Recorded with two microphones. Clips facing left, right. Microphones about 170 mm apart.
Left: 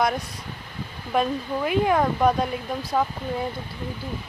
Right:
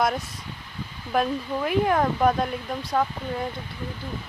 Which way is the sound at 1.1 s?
Centre (ahead or behind).